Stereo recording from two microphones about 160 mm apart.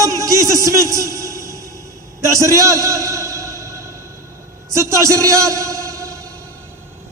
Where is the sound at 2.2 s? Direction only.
20° right (ahead or behind).